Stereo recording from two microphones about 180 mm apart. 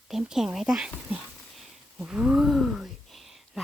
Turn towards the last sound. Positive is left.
turn(degrees=0)  # may be behind; listen again after turning